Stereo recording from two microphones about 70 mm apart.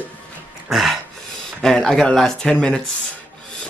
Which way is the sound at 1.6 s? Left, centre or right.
Centre.